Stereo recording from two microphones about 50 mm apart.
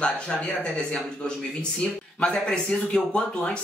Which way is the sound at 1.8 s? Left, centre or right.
Left.